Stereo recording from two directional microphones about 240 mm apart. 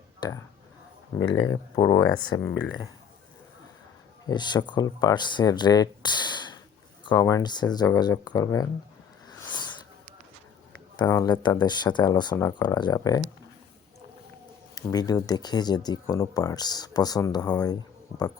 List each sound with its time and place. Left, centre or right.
0.2 s speech: centre
4.3 s speech: centre
9.4 s a sound: centre
10.9 s speech: centre
14.8 s speech: centre